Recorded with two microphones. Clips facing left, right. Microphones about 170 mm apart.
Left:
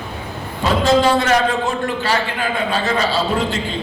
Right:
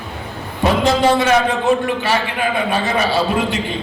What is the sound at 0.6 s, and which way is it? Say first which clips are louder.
A man's voice: even; 20° right (ahead or behind).